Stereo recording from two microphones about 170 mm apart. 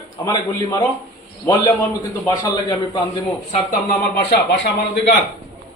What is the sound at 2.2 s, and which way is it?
Speech, 20° left (ahead or behind).